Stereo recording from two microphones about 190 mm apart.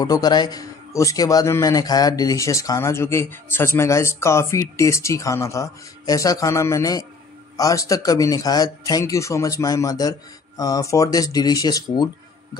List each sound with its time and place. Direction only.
0.0 s speech: 20° left (ahead or behind)